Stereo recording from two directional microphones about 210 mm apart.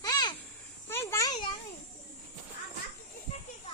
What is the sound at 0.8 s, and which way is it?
Insect, 10° left (ahead or behind).